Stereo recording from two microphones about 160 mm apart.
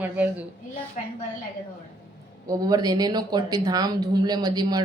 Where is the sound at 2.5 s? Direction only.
25° right (ahead or behind).